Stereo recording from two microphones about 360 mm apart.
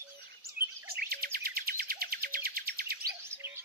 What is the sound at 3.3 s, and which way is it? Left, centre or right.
Bird, centre.